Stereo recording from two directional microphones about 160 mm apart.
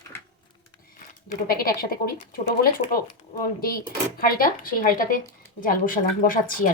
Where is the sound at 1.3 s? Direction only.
65° left (ahead or behind).